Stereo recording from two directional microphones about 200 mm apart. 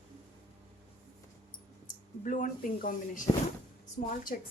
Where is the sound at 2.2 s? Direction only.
40° left (ahead or behind).